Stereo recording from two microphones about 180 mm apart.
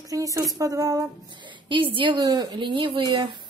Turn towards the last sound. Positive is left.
turn(degrees=-25)  # may be behind; listen again after turning